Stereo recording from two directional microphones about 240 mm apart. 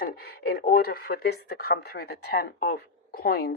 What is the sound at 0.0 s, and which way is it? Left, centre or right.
A woman's voice, left.